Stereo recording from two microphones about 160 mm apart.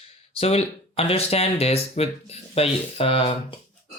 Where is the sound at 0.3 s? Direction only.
40° left (ahead or behind).